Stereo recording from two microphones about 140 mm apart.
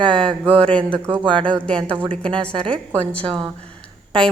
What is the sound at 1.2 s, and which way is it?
Speech, 35° right (ahead or behind).